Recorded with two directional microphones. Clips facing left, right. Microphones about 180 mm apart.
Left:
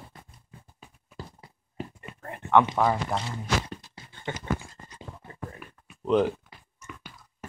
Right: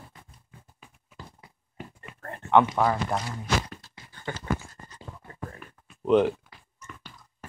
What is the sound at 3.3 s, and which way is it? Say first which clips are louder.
Beatboxing: even; 25° left (ahead or behind).